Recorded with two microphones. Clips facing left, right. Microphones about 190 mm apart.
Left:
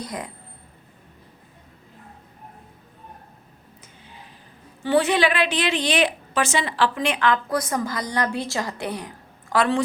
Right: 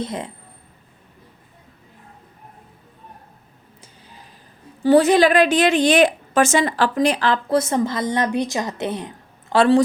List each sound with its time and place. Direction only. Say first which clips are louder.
0.0 s speech: right 5 dB; 25° right (ahead or behind)
4.8 s a woman's voice: right 6 dB; 40° right (ahead or behind)